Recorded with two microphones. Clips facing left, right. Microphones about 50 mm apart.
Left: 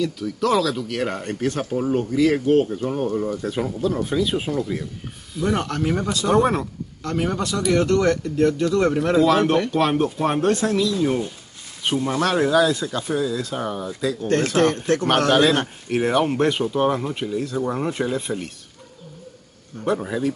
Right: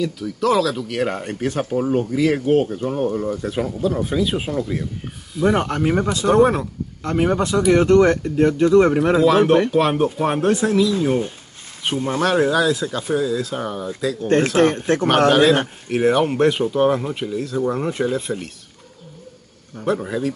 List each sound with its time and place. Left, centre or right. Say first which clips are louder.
0.0 s speech: right 2 dB; centre
5.4 s speech: right 4 dB; right
6.2 s speech: right 3 dB; centre
7.0 s speech: right 5 dB; right
9.1 s speech: right 2 dB; centre
11.9 s speech: even; right
12.2 s speech: right 1 dB; centre
14.2 s speech: right 3 dB; right
15.9 s speech: right 3 dB; centre
19.8 s speech: right 1 dB; centre